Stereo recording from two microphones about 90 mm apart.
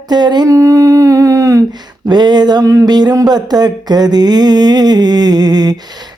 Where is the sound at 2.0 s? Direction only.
50° right (ahead or behind).